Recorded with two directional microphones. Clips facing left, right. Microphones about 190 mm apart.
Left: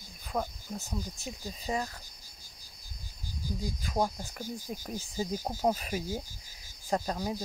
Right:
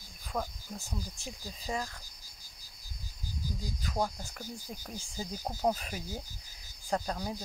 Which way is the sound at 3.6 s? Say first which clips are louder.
Left 3 dB; 15° left (ahead or behind).